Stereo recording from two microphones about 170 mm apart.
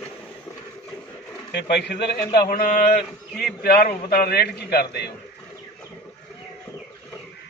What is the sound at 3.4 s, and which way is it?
A man's voice, 65° left (ahead or behind).